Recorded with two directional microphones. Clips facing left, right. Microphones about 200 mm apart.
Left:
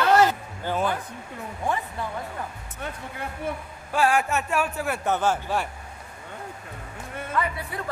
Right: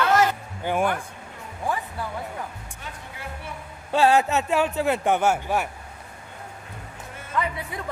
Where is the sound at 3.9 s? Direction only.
25° right (ahead or behind).